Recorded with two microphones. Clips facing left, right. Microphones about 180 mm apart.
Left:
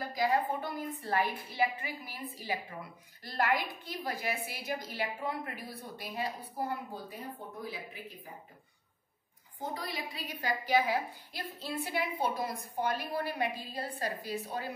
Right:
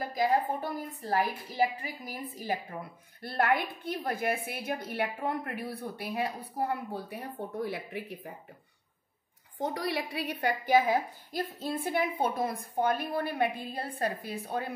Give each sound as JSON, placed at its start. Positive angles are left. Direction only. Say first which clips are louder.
{"t": 0.2, "sound": "a woman's voice", "louder": "right 2 dB", "side_deg": -40}
{"t": 3.2, "sound": "a woman's voice", "louder": "right 3 dB", "side_deg": -55}
{"t": 9.6, "sound": "a woman's voice", "louder": "right 7 dB", "side_deg": -75}